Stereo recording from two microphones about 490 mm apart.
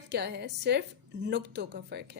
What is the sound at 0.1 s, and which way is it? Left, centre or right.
A woman's voice, centre.